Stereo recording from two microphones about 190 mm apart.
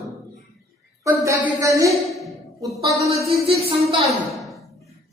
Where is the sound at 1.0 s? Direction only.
15° right (ahead or behind).